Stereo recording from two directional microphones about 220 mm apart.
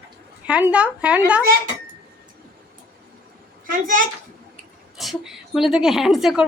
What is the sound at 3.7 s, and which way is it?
Speech, 40° right (ahead or behind).